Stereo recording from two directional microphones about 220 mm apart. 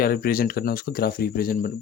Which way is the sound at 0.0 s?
40° left (ahead or behind).